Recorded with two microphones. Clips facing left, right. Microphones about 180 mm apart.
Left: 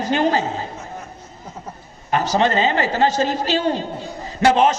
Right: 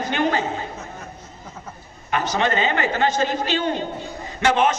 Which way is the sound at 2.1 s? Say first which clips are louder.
Left 4 dB; 35° left (ahead or behind).